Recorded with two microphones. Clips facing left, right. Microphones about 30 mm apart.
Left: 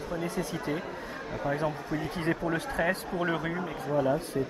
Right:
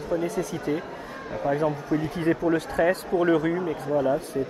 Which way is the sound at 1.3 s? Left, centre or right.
Centre.